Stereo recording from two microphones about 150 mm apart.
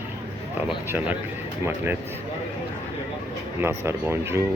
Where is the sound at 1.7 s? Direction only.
15° right (ahead or behind).